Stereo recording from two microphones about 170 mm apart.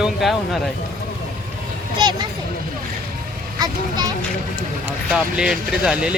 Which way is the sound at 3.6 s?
25° right (ahead or behind).